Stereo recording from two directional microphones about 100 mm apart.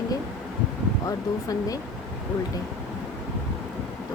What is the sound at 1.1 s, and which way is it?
Speech, 35° left (ahead or behind).